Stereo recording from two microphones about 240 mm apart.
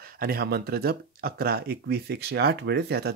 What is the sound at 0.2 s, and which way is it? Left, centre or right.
Speech, right.